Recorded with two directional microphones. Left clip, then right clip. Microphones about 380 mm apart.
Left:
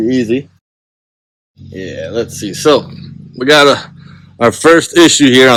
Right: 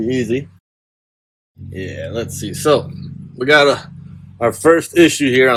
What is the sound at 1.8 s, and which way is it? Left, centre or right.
Speech, centre.